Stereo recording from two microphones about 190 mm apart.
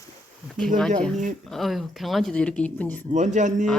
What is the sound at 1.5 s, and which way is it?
Speech, centre (ahead or behind).